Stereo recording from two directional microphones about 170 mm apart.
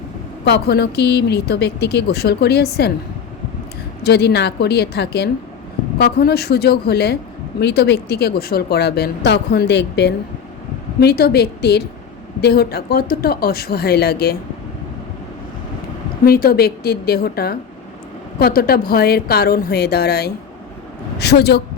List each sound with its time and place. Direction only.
0.4 s speech: 70° left (ahead or behind)
4.0 s speech: 75° left (ahead or behind)
11.0 s speech: 65° left (ahead or behind)
16.2 s speech: 60° left (ahead or behind)